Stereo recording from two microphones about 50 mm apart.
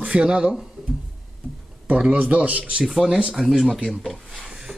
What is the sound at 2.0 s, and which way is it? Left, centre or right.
Speech, right.